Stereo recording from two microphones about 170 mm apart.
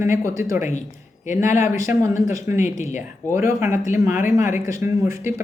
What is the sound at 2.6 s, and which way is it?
Speech, 45° left (ahead or behind).